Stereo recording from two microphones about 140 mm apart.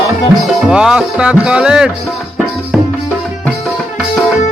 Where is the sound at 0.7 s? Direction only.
5° right (ahead or behind).